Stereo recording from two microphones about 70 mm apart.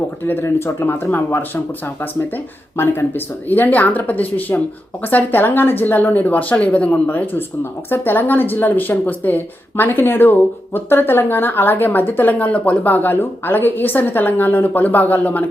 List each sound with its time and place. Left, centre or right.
0.4 s speech: left